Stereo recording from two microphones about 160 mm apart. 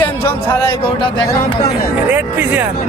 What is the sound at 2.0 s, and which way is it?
Speech, 10° right (ahead or behind).